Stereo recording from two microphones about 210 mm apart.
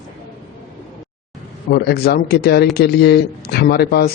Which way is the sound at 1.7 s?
50° left (ahead or behind).